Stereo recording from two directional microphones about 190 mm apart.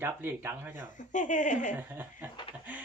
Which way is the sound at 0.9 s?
40° left (ahead or behind).